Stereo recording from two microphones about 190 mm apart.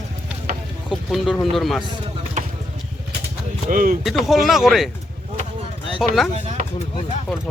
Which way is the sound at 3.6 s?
45° right (ahead or behind).